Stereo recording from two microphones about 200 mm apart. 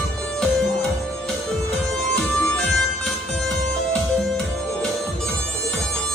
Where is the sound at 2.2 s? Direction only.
Centre (ahead or behind).